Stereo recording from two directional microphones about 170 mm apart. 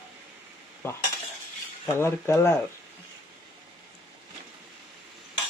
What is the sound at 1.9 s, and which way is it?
Speech, 15° left (ahead or behind).